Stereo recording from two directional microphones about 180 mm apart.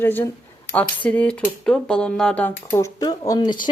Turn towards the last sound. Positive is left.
turn(degrees=25)  # may be behind; listen again after turning